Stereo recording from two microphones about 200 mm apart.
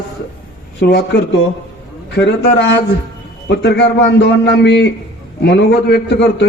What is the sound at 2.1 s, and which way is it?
A man's voice, 60° left (ahead or behind).